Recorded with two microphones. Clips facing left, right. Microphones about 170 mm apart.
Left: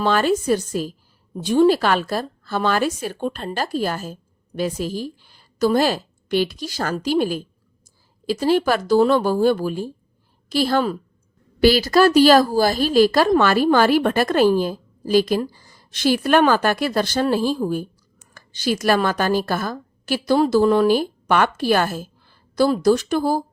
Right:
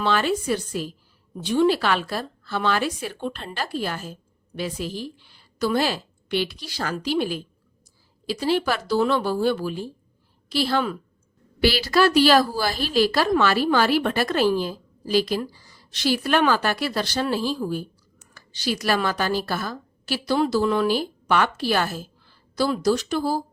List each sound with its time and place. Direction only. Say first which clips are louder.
0.0 s a woman's voice: left 4 dB; 45° left (ahead or behind)